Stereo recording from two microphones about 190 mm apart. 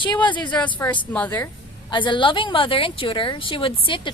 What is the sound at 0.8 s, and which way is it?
Speech, 10° left (ahead or behind).